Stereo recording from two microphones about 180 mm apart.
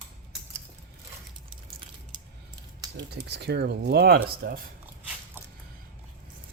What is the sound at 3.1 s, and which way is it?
Speech, 65° right (ahead or behind).